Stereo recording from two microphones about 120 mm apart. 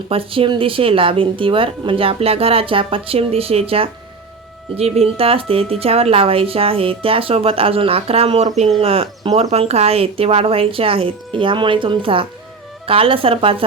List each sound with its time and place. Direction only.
0.1 s speech: 50° right (ahead or behind)